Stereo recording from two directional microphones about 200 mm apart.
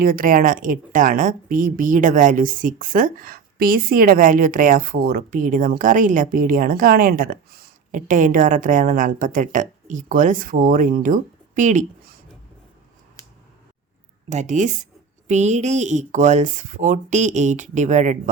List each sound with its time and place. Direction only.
0.0 s a woman's voice: 45° right (ahead or behind)
14.3 s speech: 35° right (ahead or behind)